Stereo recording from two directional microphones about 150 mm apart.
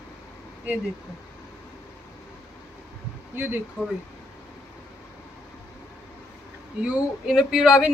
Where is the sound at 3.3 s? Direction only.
15° right (ahead or behind).